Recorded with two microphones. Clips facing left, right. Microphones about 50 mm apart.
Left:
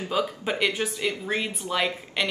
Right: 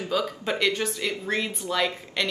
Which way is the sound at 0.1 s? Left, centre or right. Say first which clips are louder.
Even; centre.